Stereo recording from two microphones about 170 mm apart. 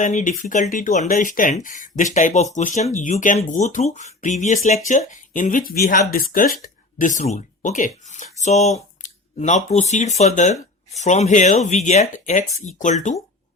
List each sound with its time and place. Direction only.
0.0 s speech: 45° left (ahead or behind)